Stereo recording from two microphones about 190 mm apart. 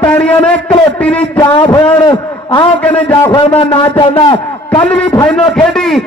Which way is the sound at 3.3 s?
25° left (ahead or behind).